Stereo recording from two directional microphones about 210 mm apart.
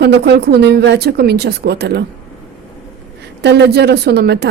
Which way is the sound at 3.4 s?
55° right (ahead or behind).